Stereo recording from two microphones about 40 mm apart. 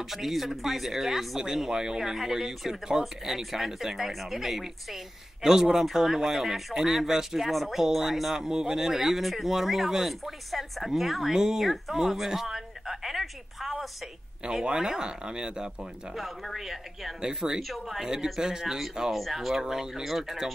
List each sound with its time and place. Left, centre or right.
0.1 s a woman's voice: centre
14.6 s speech: centre
16.5 s speech: centre
17.2 s speech: centre
17.6 s speech: centre
19.1 s speech: centre